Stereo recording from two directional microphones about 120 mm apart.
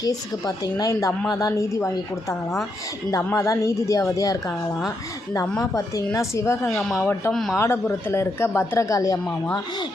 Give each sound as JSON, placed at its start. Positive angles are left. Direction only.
{"t": 0.0, "sound": "speech", "side_deg": 30}
{"t": 3.2, "sound": "speech", "side_deg": 20}
{"t": 6.1, "sound": "speech", "side_deg": 25}
{"t": 6.7, "sound": "a man's voice", "side_deg": 5}
{"t": 7.0, "sound": "speech", "side_deg": 15}